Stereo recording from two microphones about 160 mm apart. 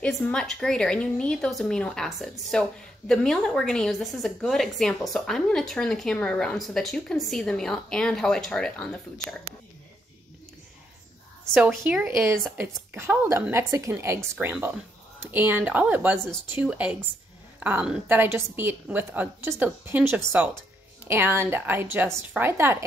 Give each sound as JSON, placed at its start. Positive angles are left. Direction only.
{"t": 0.0, "sound": "a woman's voice", "side_deg": 5}
{"t": 11.5, "sound": "a woman's voice", "side_deg": -10}